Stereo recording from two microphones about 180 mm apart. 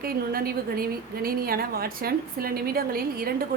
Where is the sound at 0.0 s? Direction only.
55° right (ahead or behind).